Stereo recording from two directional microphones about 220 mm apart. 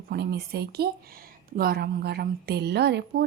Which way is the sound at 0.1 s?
45° right (ahead or behind).